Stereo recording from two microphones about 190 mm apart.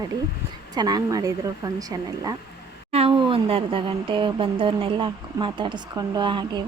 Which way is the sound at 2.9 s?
30° right (ahead or behind).